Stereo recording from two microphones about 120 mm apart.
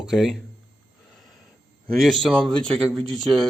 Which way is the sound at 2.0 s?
Centre (ahead or behind).